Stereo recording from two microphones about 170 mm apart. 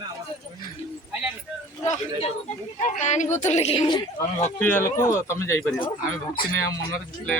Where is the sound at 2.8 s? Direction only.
45° left (ahead or behind).